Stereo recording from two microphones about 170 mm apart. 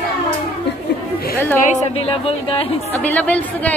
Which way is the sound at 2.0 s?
35° left (ahead or behind).